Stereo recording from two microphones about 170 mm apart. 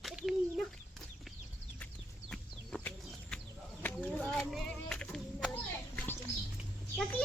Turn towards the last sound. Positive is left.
turn(degrees=0)  # may be behind; listen again after turning